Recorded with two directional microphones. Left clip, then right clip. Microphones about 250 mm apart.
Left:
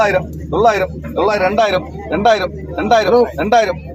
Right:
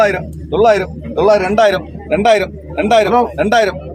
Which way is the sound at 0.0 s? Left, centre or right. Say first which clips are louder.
Right 1 dB; right.